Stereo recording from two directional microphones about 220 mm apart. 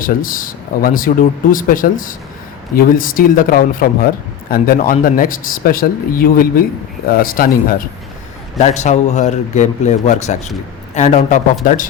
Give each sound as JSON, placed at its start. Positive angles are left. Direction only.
{"t": 0.0, "sound": "speech", "side_deg": 40}
{"t": 8.5, "sound": "speech", "side_deg": 30}